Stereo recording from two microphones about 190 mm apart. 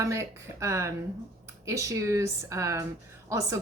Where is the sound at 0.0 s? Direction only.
15° right (ahead or behind).